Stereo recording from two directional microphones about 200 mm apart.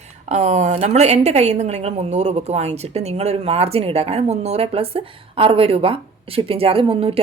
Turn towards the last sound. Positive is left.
turn(degrees=-30)  # may be behind; listen again after turning